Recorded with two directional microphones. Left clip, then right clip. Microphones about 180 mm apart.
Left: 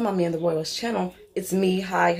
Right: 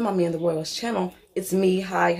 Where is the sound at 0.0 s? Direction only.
Centre (ahead or behind).